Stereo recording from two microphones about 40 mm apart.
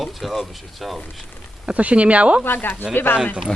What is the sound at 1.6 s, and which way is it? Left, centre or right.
Speech, right.